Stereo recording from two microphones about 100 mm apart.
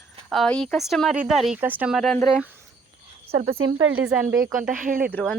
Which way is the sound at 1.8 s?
Centre (ahead or behind).